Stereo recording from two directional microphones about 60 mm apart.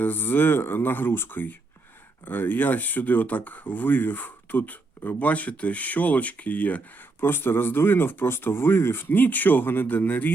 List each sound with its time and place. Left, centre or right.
0.0 s speech: left
7.2 s speech: left